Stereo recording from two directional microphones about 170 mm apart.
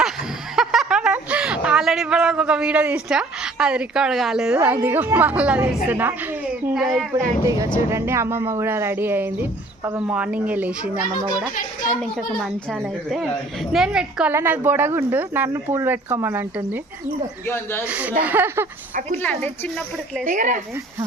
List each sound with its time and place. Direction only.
0.5 s a sound: centre (ahead or behind)
4.6 s speech: 10° right (ahead or behind)
7.1 s speech: 20° right (ahead or behind)
12.8 s speech: centre (ahead or behind)
17.4 s a woman's voice: 15° left (ahead or behind)
17.8 s speech: 10° right (ahead or behind)
19.2 s a woman's voice: 10° left (ahead or behind)
20.2 s speech: 50° right (ahead or behind)